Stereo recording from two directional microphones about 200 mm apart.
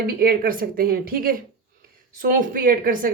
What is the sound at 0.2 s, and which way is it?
Speech, 45° right (ahead or behind).